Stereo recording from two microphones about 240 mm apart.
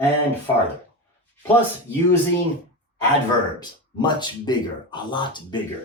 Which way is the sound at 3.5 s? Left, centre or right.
Centre.